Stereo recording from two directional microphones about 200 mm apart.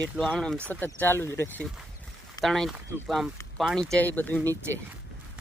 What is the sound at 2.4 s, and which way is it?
Speech, centre (ahead or behind).